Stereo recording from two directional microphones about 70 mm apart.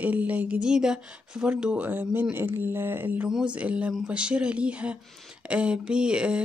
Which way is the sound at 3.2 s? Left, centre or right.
Centre.